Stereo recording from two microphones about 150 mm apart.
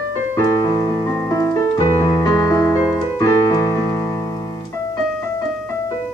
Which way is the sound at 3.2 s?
25° left (ahead or behind).